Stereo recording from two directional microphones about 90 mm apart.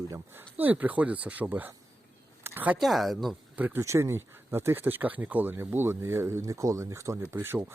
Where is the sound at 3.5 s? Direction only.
20° right (ahead or behind).